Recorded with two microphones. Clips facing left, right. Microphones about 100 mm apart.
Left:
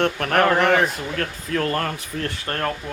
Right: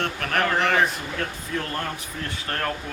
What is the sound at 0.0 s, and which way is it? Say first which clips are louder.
Speech: left 6 dB; 45° left (ahead or behind).